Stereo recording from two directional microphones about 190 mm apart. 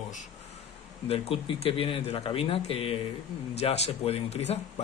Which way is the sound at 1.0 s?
30° left (ahead or behind).